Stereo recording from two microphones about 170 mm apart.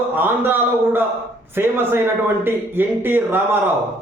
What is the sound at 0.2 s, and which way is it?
A man's voice, 10° right (ahead or behind).